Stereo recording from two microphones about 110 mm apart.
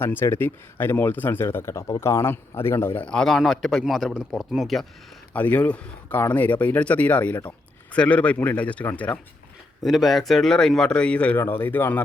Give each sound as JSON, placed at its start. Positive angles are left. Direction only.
{"t": 0.0, "sound": "speech", "side_deg": 20}
{"t": 5.3, "sound": "a man's voice", "side_deg": 15}
{"t": 9.8, "sound": "a man's voice", "side_deg": 0}